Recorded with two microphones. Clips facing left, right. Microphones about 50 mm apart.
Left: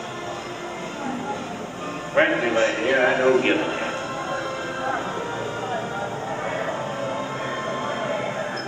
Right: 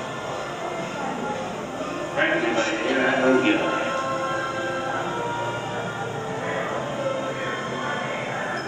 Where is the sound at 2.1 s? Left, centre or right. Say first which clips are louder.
Left 3 dB; left.